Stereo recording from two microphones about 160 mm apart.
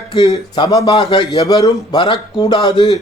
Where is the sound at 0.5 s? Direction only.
25° left (ahead or behind).